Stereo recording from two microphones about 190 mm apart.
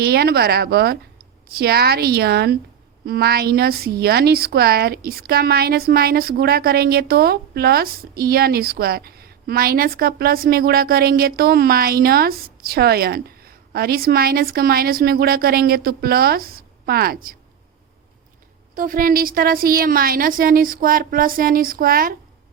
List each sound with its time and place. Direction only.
0.0 s a woman's voice: 55° right (ahead or behind)
18.7 s a woman's voice: 50° right (ahead or behind)